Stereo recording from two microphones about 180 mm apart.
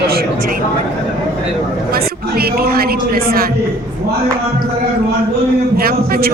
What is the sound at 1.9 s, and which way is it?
A woman's voice, 60° right (ahead or behind).